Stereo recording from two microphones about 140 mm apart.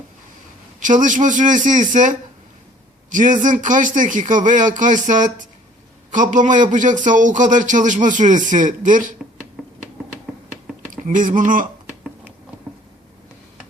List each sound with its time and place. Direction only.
0.8 s a man's voice: 65° right (ahead or behind)
9.6 s finger snapping: 5° right (ahead or behind)
10.3 s computer keyboard: 5° right (ahead or behind)
11.0 s speech: 70° right (ahead or behind)